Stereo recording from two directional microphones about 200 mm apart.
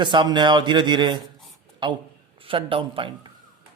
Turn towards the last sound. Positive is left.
turn(degrees=-25)  # may be behind; listen again after turning